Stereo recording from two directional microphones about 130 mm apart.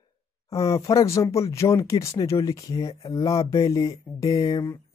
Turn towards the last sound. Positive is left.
turn(degrees=30)  # may be behind; listen again after turning